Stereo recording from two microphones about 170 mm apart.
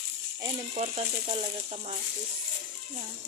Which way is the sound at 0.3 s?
25° right (ahead or behind).